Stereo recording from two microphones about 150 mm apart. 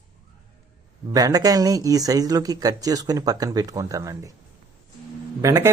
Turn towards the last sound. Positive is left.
turn(degrees=-20)  # may be behind; listen again after turning